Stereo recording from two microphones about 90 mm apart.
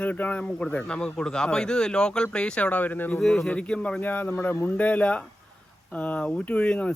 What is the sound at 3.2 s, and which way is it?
Speech, 5° left (ahead or behind).